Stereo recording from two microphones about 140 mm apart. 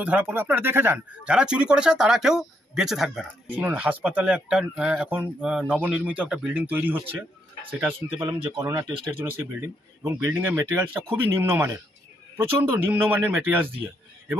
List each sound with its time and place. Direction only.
0.0 s speech: 10° right (ahead or behind)
8.3 s speech: 25° right (ahead or behind)